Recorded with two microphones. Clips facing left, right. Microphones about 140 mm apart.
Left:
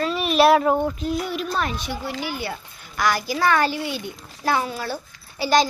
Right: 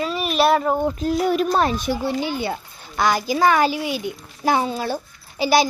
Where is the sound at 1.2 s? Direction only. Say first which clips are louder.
Right 7 dB; 45° right (ahead or behind).